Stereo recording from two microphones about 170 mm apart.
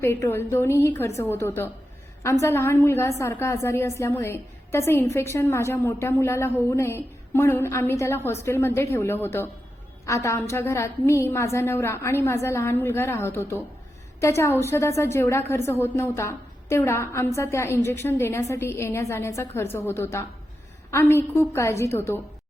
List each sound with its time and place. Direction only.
0.0 s a woman's voice: 15° left (ahead or behind)